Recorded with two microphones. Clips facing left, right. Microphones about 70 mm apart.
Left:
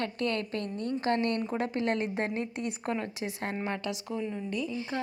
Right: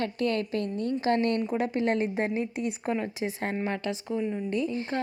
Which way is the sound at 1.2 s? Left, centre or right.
Left.